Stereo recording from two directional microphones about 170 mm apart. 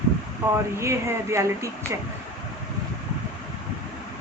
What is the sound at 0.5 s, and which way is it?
Speech, 15° right (ahead or behind).